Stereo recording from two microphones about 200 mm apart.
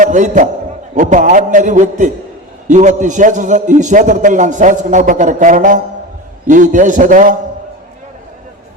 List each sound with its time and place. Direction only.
0.0 s a man's voice: 40° right (ahead or behind)